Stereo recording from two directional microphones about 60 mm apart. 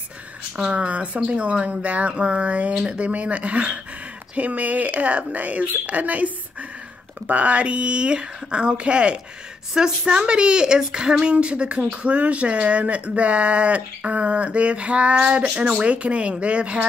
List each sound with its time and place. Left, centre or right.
0.6 s speech: centre